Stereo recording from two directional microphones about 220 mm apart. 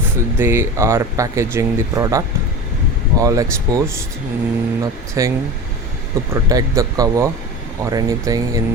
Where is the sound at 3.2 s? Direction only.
15° right (ahead or behind).